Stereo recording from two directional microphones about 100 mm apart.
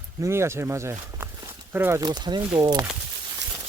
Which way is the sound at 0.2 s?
25° right (ahead or behind).